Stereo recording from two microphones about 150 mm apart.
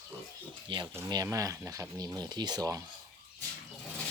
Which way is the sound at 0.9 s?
25° right (ahead or behind).